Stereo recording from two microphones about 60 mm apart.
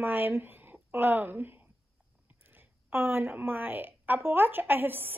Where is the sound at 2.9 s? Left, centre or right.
Right.